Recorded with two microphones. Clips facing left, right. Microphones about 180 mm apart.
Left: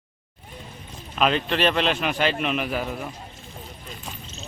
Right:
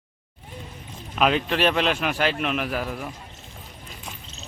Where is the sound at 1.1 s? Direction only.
5° right (ahead or behind).